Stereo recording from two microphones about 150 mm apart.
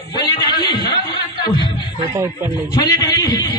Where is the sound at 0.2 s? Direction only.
30° left (ahead or behind).